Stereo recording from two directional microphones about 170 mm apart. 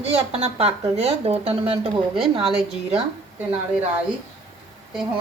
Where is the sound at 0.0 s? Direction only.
35° right (ahead or behind).